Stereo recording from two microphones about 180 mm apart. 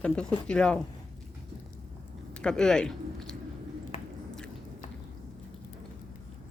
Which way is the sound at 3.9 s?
35° left (ahead or behind).